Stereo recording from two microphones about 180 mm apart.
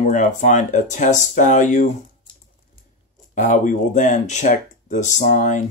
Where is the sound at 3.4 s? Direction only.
45° left (ahead or behind).